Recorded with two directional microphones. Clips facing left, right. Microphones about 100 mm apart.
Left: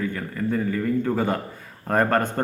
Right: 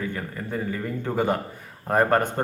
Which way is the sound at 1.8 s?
20° right (ahead or behind).